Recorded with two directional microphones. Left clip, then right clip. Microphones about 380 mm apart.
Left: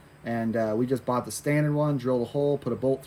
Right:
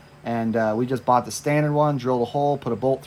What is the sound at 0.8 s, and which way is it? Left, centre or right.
Speech, centre.